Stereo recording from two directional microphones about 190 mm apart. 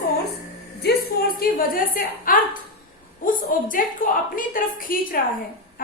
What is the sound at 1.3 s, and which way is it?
A woman's voice, 50° left (ahead or behind).